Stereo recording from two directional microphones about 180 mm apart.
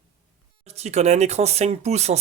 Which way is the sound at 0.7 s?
40° right (ahead or behind).